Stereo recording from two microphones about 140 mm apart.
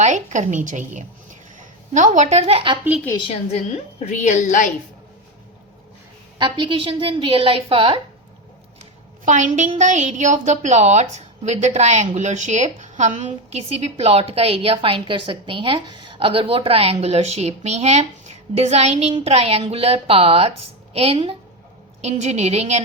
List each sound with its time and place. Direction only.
0.0 s a woman's voice: 60° right (ahead or behind)
4.0 s a woman's voice: 60° left (ahead or behind)
6.4 s a woman's voice: 35° right (ahead or behind)
9.2 s a woman's voice: 60° right (ahead or behind)